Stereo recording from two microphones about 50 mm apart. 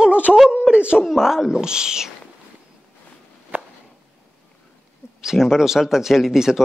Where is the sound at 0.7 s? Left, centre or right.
Right.